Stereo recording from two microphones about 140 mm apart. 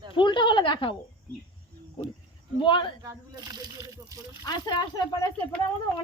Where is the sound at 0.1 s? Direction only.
35° left (ahead or behind).